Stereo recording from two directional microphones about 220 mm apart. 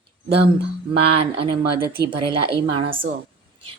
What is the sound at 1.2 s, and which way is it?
Speech, 25° right (ahead or behind).